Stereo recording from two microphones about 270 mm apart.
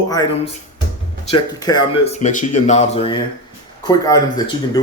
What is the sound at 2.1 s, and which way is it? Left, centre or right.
Speech, left.